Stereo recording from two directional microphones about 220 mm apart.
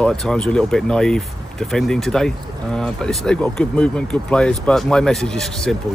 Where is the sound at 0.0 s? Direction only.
Centre (ahead or behind).